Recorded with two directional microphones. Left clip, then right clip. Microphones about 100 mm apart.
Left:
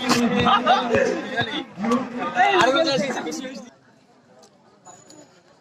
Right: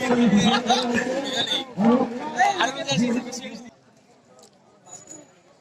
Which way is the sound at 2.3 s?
40° left (ahead or behind).